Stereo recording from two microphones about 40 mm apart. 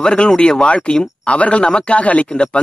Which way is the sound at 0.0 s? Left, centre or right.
Left.